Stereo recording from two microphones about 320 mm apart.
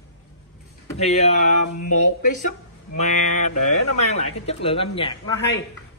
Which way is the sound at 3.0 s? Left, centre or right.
Left.